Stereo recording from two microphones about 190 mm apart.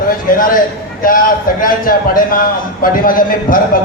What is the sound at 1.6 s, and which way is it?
A man's voice, 45° left (ahead or behind).